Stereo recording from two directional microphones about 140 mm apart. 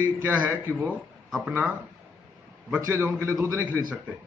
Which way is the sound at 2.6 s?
15° right (ahead or behind).